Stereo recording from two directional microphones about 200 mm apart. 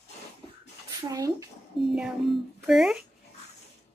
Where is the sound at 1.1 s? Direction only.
15° right (ahead or behind).